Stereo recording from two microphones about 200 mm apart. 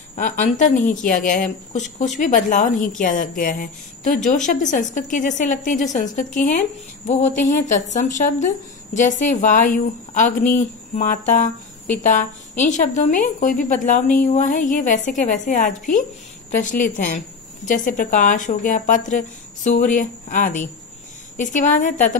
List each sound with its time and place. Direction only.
0.1 s a woman's voice: 40° left (ahead or behind)